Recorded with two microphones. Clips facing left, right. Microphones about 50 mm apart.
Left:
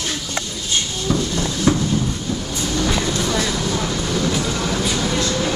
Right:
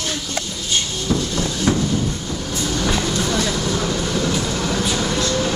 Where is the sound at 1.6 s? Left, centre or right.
Right.